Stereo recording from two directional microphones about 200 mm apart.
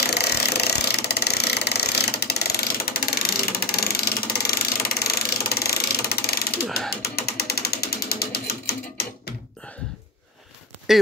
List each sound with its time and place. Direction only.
0.0 s engine: 55° left (ahead or behind)
7.0 s mechanisms: 55° left (ahead or behind)
10.9 s speech: centre (ahead or behind)